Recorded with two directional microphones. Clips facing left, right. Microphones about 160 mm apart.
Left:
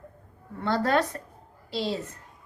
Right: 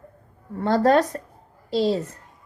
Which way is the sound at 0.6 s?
40° right (ahead or behind).